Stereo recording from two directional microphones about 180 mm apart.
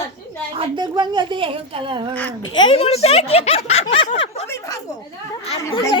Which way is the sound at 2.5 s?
30° left (ahead or behind).